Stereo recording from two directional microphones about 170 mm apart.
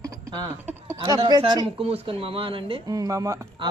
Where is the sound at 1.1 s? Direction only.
30° right (ahead or behind).